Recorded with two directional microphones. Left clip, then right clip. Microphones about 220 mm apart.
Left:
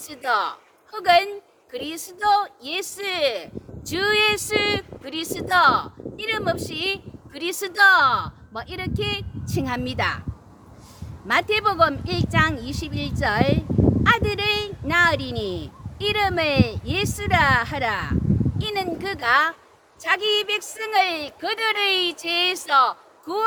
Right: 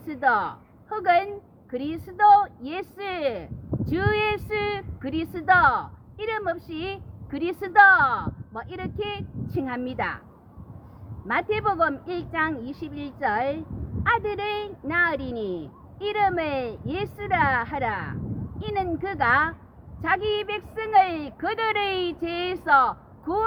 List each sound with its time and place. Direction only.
0.1 s a woman's voice: 20° left (ahead or behind)
11.3 s a woman's voice: 15° left (ahead or behind)